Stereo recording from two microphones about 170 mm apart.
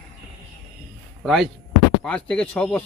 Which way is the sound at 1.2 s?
Centre (ahead or behind).